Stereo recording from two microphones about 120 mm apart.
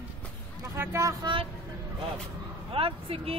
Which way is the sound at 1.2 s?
50° right (ahead or behind).